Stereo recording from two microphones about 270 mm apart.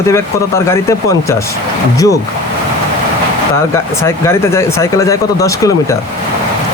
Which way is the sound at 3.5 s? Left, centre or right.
Centre.